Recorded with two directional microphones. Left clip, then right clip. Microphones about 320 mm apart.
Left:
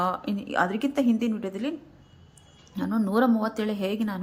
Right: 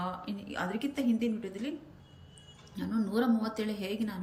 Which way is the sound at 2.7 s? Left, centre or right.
Centre.